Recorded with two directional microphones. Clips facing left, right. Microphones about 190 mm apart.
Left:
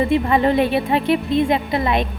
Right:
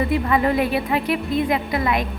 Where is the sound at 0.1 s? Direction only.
25° left (ahead or behind).